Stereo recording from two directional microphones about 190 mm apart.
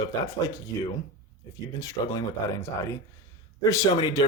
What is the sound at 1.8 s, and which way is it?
Speech, 20° left (ahead or behind).